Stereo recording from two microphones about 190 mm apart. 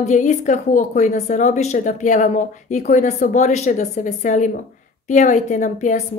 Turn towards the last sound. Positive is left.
turn(degrees=40)  # may be behind; listen again after turning